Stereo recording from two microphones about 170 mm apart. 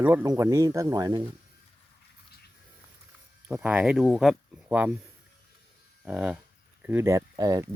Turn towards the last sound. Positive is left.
turn(degrees=-20)  # may be behind; listen again after turning